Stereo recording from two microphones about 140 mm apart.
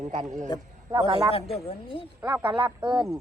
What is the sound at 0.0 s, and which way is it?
Speech, 60° right (ahead or behind).